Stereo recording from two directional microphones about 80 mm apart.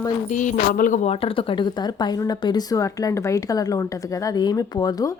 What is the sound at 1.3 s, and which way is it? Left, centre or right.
Speech, left.